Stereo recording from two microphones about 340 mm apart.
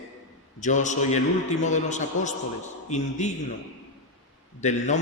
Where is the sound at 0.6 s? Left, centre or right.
Left.